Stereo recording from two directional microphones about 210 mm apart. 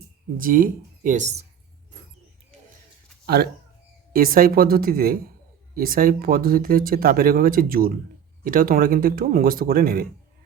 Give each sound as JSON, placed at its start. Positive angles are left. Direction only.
{"t": 0.3, "sound": "speech", "side_deg": -40}
{"t": 3.2, "sound": "speech", "side_deg": -50}